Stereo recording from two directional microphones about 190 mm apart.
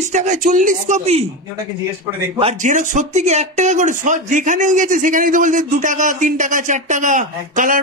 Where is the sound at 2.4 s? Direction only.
40° right (ahead or behind).